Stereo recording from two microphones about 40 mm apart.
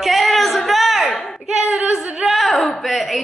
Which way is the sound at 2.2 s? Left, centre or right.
Centre.